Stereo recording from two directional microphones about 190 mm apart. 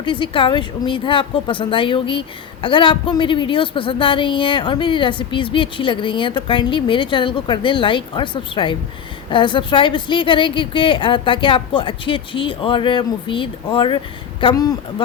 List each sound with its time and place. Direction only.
0.0 s speech: 25° left (ahead or behind)